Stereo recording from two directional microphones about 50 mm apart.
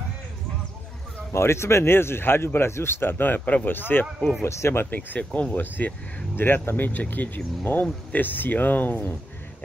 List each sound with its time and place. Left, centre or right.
1.3 s speech: left
4.5 s speech: left
4.9 s speech: left